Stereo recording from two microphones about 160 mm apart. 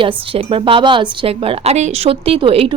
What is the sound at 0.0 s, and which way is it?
A woman's voice, 35° right (ahead or behind).